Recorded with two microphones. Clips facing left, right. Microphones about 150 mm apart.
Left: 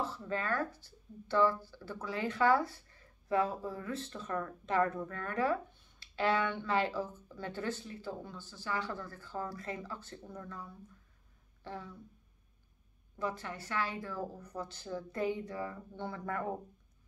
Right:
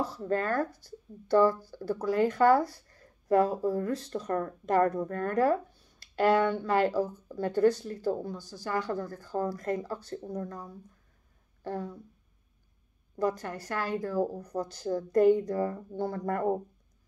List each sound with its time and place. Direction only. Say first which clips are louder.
0.0 s speech: right 7 dB; 40° right (ahead or behind)
13.1 s speech: right 8 dB; 40° right (ahead or behind)